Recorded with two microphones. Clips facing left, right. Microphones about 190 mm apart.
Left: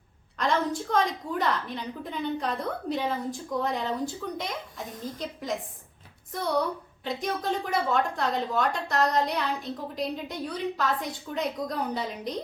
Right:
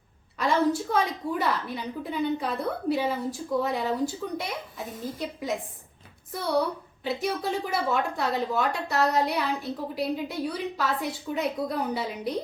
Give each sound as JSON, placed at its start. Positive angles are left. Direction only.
{"t": 0.3, "sound": "a woman's voice", "side_deg": -5}
{"t": 7.0, "sound": "a woman's voice", "side_deg": -5}